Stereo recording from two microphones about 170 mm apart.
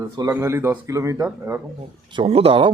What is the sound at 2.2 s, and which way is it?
Speech, 35° right (ahead or behind).